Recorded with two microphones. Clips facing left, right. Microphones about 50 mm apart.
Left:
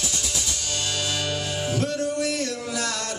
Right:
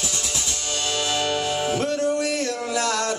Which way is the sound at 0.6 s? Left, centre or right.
Right.